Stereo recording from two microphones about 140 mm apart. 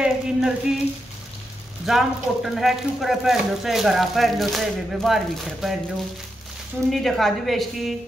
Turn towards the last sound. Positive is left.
turn(degrees=0)  # may be behind; listen again after turning